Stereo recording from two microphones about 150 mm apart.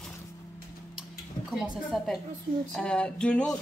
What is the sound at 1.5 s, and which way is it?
A woman's voice, centre (ahead or behind).